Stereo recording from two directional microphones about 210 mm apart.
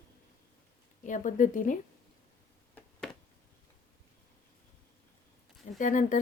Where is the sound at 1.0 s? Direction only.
40° left (ahead or behind).